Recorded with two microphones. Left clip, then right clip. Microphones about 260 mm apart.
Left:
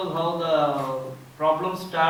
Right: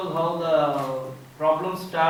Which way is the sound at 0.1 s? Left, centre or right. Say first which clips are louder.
Right 2 dB; centre.